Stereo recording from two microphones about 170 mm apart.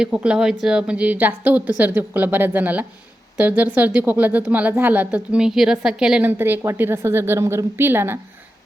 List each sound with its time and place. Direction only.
0.0 s speech: 5° right (ahead or behind)